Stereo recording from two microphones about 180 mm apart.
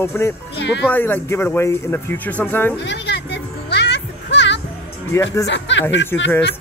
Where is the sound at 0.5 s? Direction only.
75° left (ahead or behind).